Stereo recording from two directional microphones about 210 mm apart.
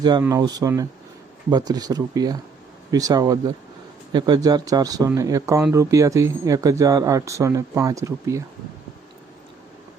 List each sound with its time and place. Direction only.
0.0 s speech: 15° right (ahead or behind)